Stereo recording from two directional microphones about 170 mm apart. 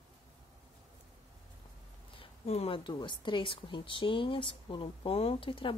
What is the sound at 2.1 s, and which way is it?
Speech, 35° left (ahead or behind).